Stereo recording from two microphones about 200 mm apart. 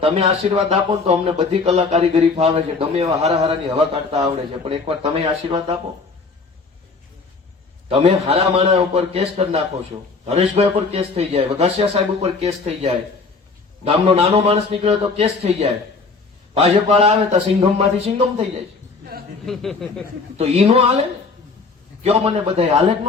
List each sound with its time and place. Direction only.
0.0 s speech: 30° right (ahead or behind)
7.9 s speech: 30° right (ahead or behind)
19.5 s speech: centre (ahead or behind)
20.4 s speech: 30° right (ahead or behind)
22.0 s speech: 30° right (ahead or behind)